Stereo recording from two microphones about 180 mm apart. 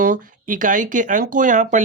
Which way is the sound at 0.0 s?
50° right (ahead or behind).